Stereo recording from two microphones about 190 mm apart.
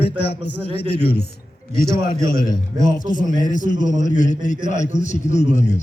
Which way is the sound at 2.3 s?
45° left (ahead or behind).